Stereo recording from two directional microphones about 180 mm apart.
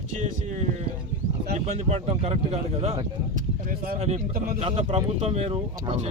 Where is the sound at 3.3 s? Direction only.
50° right (ahead or behind).